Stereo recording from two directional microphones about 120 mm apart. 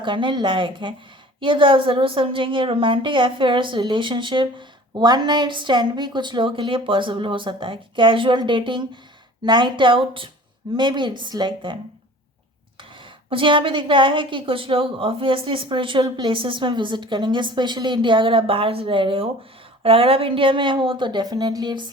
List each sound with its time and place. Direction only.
0.0 s a woman's voice: 40° right (ahead or behind)
13.3 s a woman's voice: 45° right (ahead or behind)